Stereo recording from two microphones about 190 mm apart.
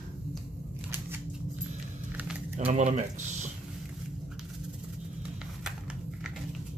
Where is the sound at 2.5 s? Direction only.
35° right (ahead or behind).